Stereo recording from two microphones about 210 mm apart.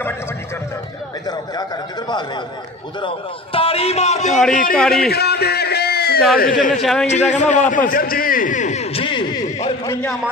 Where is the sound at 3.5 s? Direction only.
30° left (ahead or behind).